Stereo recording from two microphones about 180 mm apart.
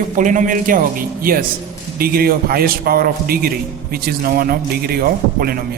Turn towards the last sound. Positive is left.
turn(degrees=-55)  # may be behind; listen again after turning